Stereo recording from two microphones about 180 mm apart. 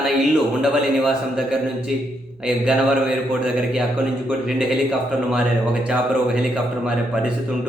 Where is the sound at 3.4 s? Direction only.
5° right (ahead or behind).